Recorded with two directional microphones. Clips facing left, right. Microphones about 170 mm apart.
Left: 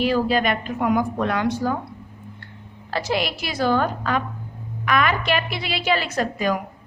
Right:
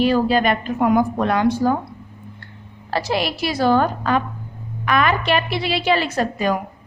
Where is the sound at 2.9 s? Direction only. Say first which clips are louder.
Right 2 dB; 35° right (ahead or behind).